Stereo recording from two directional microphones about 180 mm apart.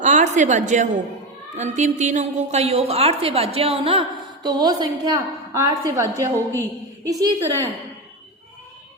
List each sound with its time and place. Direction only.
0.0 s a sound: 40° right (ahead or behind)
1.5 s a woman's voice: 40° right (ahead or behind)
4.4 s a woman's voice: 20° right (ahead or behind)